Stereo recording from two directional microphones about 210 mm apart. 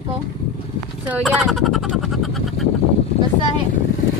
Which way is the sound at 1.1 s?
Centre (ahead or behind).